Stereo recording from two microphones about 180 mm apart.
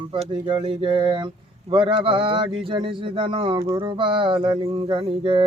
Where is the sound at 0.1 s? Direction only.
25° right (ahead or behind).